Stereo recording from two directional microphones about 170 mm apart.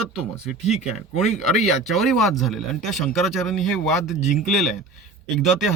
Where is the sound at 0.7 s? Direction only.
40° left (ahead or behind).